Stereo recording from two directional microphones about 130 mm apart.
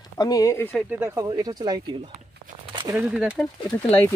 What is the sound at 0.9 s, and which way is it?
Speech, 20° right (ahead or behind).